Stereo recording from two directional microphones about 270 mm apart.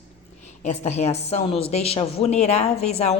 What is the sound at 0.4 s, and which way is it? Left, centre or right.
A woman's voice, left.